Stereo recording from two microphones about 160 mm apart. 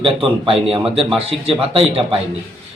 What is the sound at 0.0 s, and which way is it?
Speech, 35° right (ahead or behind).